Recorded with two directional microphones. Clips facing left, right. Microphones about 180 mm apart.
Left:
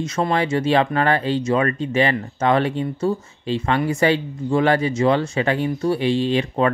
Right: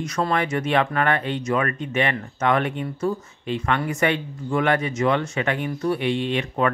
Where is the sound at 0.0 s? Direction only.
25° left (ahead or behind).